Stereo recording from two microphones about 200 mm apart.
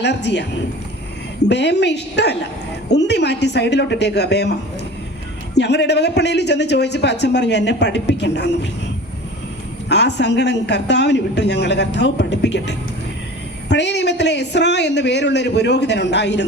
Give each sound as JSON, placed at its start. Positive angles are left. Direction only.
{"t": 0.0, "sound": "a man's voice", "side_deg": 60}
{"t": 1.5, "sound": "a man's voice", "side_deg": 60}
{"t": 5.5, "sound": "a man's voice", "side_deg": 60}
{"t": 9.9, "sound": "a man's voice", "side_deg": 60}